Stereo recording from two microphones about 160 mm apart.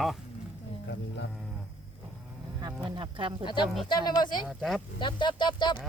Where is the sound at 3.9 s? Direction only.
25° left (ahead or behind).